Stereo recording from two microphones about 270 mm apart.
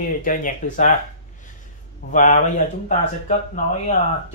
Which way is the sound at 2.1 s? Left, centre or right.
Left.